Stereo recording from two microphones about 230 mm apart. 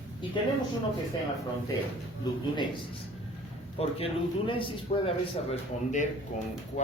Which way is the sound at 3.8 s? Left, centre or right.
Left.